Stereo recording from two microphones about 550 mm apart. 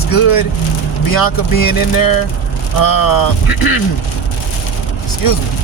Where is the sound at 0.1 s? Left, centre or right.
Left.